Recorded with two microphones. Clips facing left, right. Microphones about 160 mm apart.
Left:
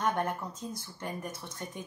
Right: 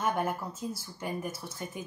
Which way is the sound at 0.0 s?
5° right (ahead or behind).